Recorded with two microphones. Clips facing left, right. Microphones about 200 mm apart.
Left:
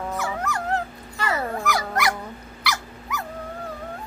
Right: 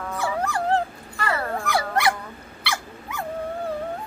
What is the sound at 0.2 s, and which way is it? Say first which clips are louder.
Dog: right 3 dB; 30° right (ahead or behind).